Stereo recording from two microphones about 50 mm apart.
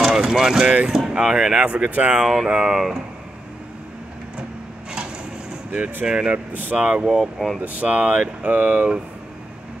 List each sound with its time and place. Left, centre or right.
0.0 s speech: centre
1.9 s speech: right
2.2 s speech: centre
6.0 s speech: centre
7.3 s speech: centre
7.6 s speech: right